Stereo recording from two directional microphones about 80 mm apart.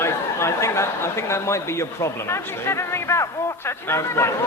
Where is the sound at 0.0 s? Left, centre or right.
Left.